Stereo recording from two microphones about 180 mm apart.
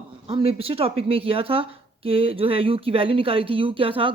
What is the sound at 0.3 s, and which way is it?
Speech, 30° right (ahead or behind).